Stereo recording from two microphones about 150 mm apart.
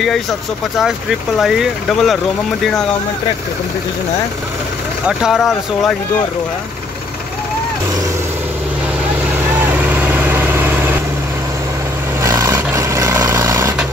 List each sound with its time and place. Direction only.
1.4 s speech: 5° right (ahead or behind)
5.0 s speech: 5° right (ahead or behind)
9.6 s vehicle: 10° right (ahead or behind)
12.2 s vehicle: 20° right (ahead or behind)